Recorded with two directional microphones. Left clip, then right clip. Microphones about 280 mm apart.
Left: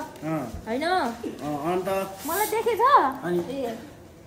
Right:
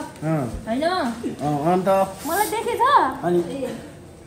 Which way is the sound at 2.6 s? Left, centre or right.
Centre.